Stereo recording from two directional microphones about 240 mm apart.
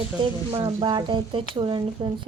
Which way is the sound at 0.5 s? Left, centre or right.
Centre.